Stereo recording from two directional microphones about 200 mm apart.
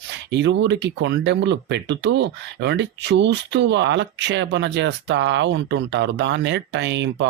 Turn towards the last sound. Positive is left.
turn(degrees=-60)  # may be behind; listen again after turning